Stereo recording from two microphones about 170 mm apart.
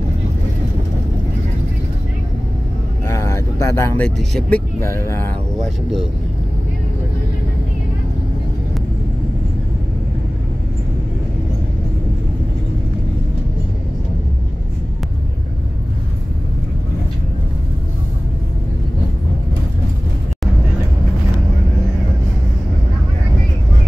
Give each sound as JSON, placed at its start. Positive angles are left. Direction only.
{"t": 3.1, "sound": "vehicle", "side_deg": 15}
{"t": 4.3, "sound": "speech", "side_deg": 0}
{"t": 4.7, "sound": "speech", "side_deg": 15}